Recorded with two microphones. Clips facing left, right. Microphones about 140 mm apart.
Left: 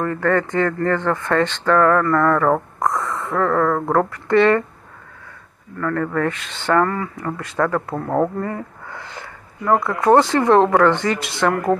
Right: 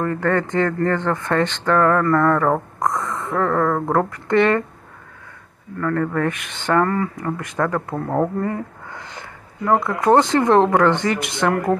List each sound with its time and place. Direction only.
0.0 s speech: 20° right (ahead or behind)
5.8 s speech: 20° right (ahead or behind)
7.9 s speech: 15° left (ahead or behind)
8.8 s speech: 20° right (ahead or behind)